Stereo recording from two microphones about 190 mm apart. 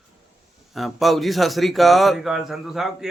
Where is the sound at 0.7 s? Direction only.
Centre (ahead or behind).